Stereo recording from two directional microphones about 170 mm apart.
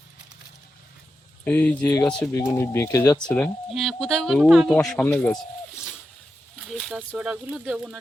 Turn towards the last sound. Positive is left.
turn(degrees=-5)  # may be behind; listen again after turning